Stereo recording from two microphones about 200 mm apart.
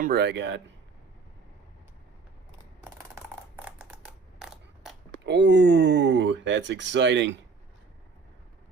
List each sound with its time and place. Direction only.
0.0 s speech: 50° right (ahead or behind)
2.8 s a sound: 10° right (ahead or behind)
5.2 s speech: 60° right (ahead or behind)